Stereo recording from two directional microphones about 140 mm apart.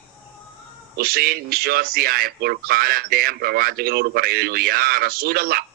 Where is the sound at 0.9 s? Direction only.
90° right.